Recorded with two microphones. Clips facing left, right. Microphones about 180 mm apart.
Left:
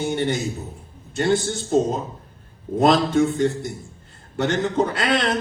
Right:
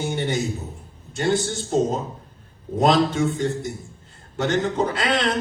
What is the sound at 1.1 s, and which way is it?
A man's voice, 60° left (ahead or behind).